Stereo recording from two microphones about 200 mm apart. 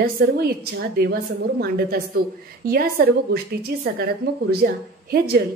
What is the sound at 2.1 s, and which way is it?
Speech, 50° right (ahead or behind).